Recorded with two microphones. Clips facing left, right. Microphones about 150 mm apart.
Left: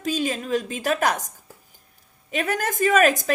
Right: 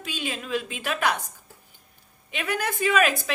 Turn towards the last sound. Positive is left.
turn(degrees=45)  # may be behind; listen again after turning